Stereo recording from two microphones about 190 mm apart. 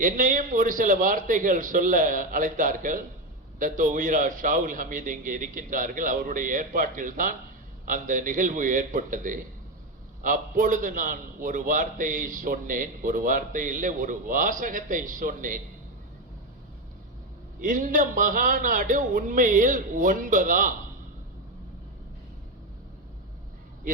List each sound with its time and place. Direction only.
0.0 s a man's voice: 45° right (ahead or behind)
17.6 s a man's voice: 45° right (ahead or behind)